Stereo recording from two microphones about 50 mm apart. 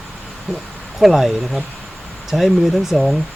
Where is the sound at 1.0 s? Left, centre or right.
Centre.